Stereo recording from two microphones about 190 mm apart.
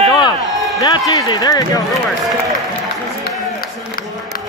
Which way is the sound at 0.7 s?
20° left (ahead or behind).